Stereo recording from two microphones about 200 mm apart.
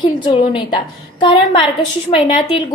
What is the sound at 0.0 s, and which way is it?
A child's voice, 25° left (ahead or behind).